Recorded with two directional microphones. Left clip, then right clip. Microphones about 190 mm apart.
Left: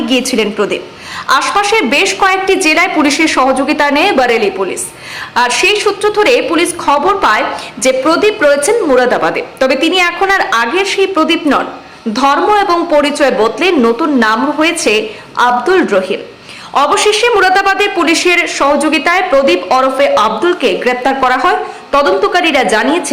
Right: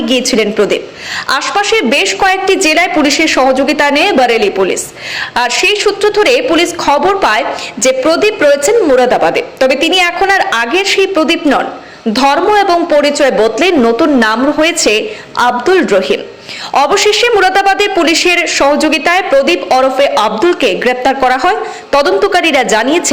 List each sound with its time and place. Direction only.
0.1 s a woman's voice: 10° right (ahead or behind)